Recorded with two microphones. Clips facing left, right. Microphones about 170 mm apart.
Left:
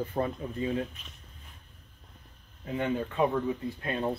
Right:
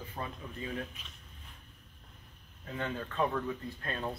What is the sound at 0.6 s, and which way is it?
Speech, 25° left (ahead or behind).